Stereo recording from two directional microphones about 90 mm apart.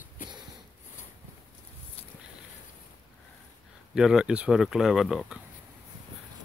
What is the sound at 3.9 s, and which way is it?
Speech, 5° right (ahead or behind).